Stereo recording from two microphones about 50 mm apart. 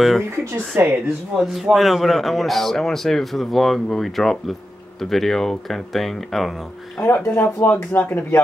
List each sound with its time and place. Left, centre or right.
0.7 s speech: right
1.4 s a man's voice: centre
7.0 s speech: left